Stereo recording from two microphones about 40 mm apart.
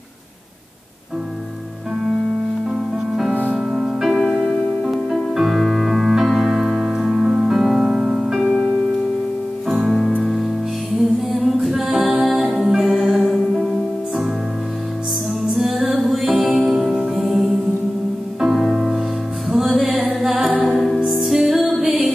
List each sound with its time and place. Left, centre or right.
3.5 s music: centre
7.4 s piano: centre
10.2 s music: centre
11.3 s a capella: centre
15.5 s music: centre
16.9 s music: right
17.3 s music: centre
20.3 s music: right
20.7 s music: centre